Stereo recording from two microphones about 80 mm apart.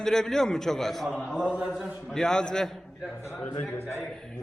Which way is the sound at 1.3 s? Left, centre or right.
Centre.